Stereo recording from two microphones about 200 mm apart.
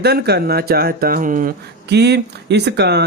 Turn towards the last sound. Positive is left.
turn(degrees=-55)  # may be behind; listen again after turning